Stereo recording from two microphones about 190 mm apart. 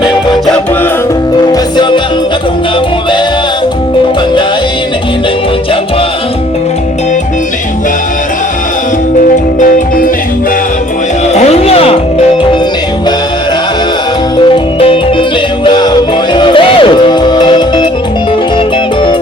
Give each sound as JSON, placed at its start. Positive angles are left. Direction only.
{"t": 1.4, "sound": "music", "side_deg": 25}
{"t": 9.6, "sound": "music", "side_deg": 45}
{"t": 11.3, "sound": "music", "side_deg": 30}
{"t": 14.4, "sound": "music", "side_deg": 30}